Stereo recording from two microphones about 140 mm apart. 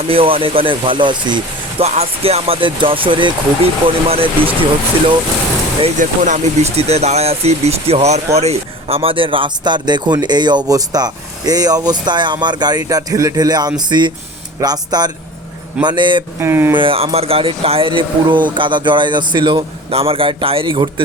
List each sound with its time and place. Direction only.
0.1 s speech: 40° right (ahead or behind)
1.8 s speech: 45° right (ahead or behind)
6.0 s speech: 60° right (ahead or behind); by 16.2 s 35° right (ahead or behind)
16.4 s speech: 15° right (ahead or behind)
16.7 s speech: 40° right (ahead or behind)